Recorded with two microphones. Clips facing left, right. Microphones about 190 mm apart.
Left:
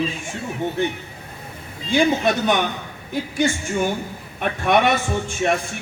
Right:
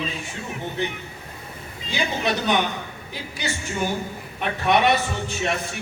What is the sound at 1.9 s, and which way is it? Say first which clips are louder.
A man's voice: left 7 dB; 50° left (ahead or behind).